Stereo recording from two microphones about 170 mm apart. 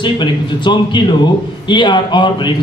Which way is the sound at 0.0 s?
25° left (ahead or behind).